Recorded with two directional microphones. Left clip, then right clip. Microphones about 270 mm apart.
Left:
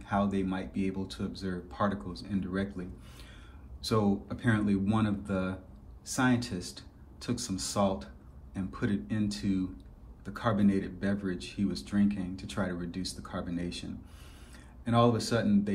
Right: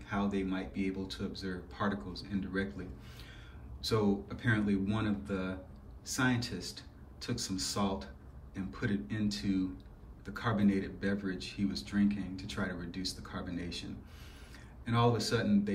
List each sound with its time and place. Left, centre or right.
0.0 s speech: centre
14.9 s speech: centre